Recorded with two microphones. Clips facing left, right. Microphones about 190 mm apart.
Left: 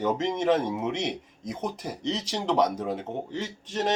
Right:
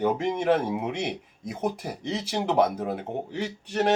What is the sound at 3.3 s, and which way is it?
Speech, 65° right (ahead or behind).